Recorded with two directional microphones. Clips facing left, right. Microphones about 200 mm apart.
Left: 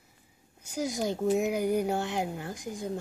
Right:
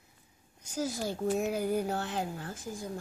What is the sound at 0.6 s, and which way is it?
Speech, 10° left (ahead or behind).